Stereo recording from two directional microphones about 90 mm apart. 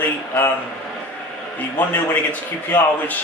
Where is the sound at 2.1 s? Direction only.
20° left (ahead or behind).